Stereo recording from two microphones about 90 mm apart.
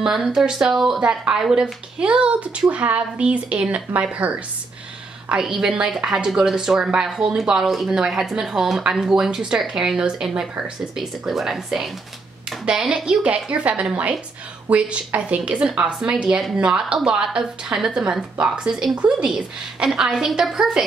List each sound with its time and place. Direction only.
0.0 s a woman's voice: 5° right (ahead or behind)